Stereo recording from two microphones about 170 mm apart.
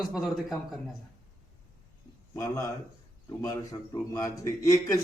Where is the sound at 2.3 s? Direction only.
20° left (ahead or behind).